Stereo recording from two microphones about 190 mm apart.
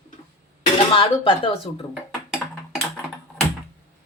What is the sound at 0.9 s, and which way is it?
Speech, 25° left (ahead or behind).